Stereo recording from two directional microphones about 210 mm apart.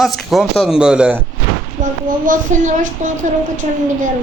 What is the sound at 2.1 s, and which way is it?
Speech, 40° right (ahead or behind).